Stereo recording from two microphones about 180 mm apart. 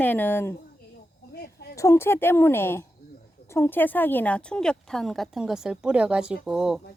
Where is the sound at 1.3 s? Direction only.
60° left (ahead or behind).